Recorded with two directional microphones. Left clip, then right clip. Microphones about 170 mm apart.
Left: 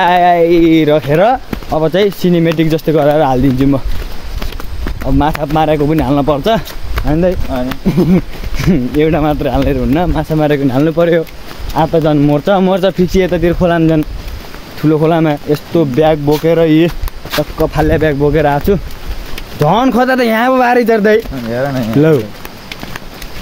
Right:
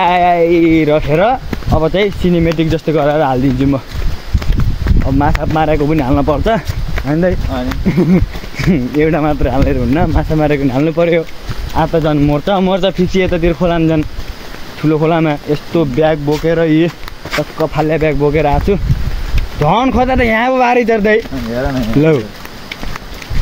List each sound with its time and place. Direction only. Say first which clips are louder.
0.0 s speech: left 2 dB; 20° left (ahead or behind)
5.0 s speech: left 1 dB; 5° left (ahead or behind)
7.1 s speech: left 1 dB; centre (ahead or behind); by 20.4 s 20° left (ahead or behind)
20.4 s speech: left 3 dB; 35° left (ahead or behind)